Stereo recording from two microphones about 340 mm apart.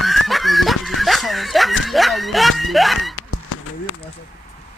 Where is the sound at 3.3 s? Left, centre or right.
Left.